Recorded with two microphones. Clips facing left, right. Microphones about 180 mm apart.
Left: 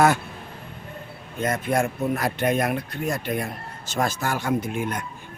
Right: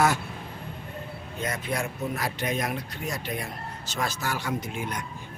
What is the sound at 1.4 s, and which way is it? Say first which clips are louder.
Speech: left 7 dB; 50° left (ahead or behind).